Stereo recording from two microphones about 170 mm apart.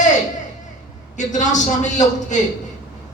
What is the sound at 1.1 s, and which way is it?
A man's voice, 45° left (ahead or behind).